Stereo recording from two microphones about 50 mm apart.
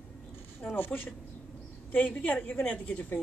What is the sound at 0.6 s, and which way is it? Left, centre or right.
A woman's voice, left.